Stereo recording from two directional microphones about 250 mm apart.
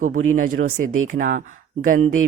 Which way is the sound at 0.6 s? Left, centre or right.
Right.